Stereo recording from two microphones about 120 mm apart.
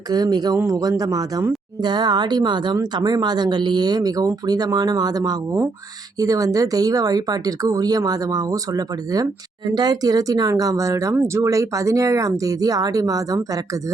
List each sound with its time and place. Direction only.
0.1 s speech: 35° right (ahead or behind)